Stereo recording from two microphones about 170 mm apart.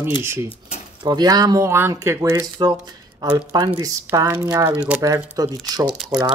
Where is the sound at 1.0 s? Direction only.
25° right (ahead or behind); by 5.0 s 10° right (ahead or behind).